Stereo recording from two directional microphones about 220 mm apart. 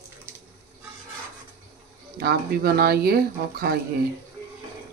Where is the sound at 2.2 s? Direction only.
45° right (ahead or behind).